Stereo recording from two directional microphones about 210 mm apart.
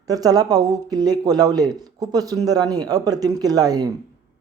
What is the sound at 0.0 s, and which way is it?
Speech, 15° right (ahead or behind).